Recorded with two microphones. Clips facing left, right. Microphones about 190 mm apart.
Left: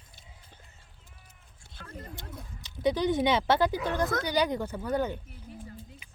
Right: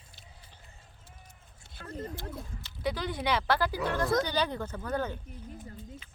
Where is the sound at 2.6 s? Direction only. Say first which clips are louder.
Left 7 dB; 20° left (ahead or behind).